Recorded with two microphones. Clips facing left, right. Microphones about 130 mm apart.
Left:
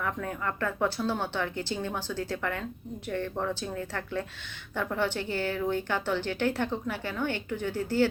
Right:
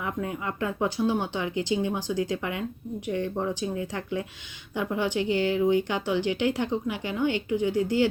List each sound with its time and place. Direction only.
0.0 s a woman's voice: 15° right (ahead or behind)